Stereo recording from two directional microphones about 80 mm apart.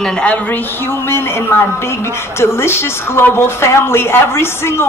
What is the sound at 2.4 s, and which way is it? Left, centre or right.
A woman's voice, left.